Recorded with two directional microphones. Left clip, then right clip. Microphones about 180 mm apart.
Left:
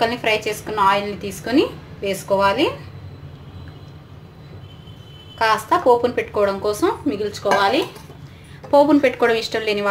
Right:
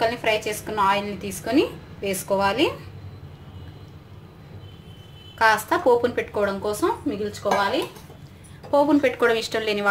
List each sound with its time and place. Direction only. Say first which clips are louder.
0.0 s a woman's voice: left 3 dB; 5° left (ahead or behind)
5.4 s speech: left 2 dB; 5° right (ahead or behind); by 8.9 s 15° left (ahead or behind)
8.9 s a woman's voice: left 3 dB; centre (ahead or behind)